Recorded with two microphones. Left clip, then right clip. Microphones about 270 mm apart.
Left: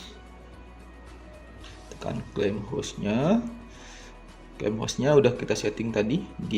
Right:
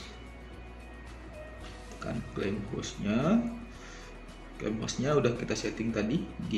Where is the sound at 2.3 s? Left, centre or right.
Left.